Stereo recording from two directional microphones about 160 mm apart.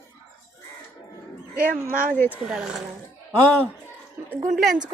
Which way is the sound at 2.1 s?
10° left (ahead or behind).